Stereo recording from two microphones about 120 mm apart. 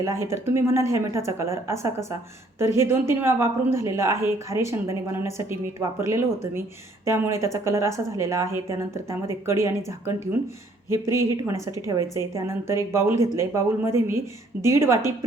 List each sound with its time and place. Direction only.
0.0 s a woman's voice: 25° right (ahead or behind)